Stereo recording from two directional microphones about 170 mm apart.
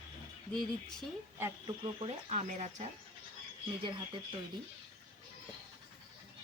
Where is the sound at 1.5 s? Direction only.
30° right (ahead or behind).